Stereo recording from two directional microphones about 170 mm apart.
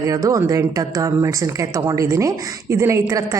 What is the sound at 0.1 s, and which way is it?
A woman's voice, 20° right (ahead or behind).